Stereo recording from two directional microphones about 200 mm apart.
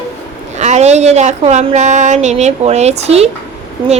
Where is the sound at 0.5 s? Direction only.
35° right (ahead or behind).